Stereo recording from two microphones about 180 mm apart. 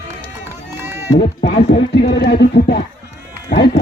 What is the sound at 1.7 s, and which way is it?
Music, 70° left (ahead or behind).